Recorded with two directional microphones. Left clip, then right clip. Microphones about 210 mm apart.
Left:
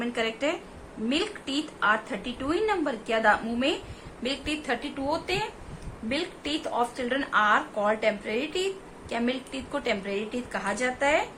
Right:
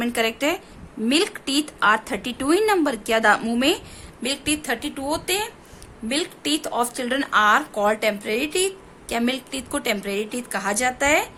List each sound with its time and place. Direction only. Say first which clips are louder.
0.0 s a woman's voice: right 6 dB; 55° right (ahead or behind)